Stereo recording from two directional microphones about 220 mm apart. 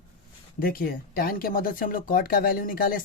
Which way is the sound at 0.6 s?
40° left (ahead or behind).